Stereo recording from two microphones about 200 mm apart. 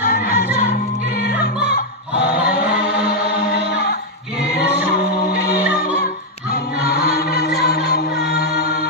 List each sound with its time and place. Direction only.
0.1 s music: 50° left (ahead or behind)
1.6 s music: 55° left (ahead or behind)
2.6 s music: 5° right (ahead or behind)
3.2 s music: 55° left (ahead or behind)
6.5 s choir: 50° left (ahead or behind)
7.6 s music: 50° left (ahead or behind)